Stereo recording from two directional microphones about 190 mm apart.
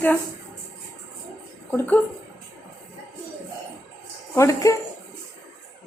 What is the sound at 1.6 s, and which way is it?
Speech, 10° left (ahead or behind).